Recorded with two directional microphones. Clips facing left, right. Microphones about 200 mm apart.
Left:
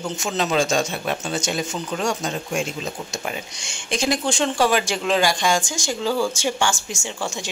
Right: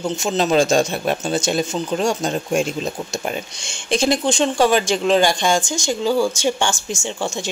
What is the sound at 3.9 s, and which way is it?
Speech, 25° right (ahead or behind).